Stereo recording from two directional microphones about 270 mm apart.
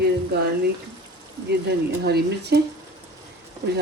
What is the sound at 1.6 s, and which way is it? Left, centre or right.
Speech, right.